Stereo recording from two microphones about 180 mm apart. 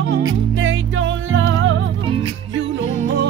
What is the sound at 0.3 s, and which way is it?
Music, 90° right.